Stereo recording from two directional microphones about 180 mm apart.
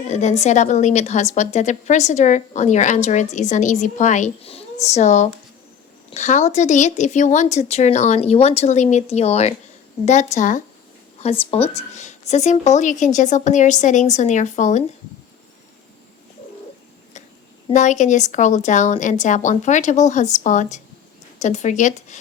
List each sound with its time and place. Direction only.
0.1 s a woman's voice: 40° left (ahead or behind)
17.7 s a woman's voice: 40° left (ahead or behind)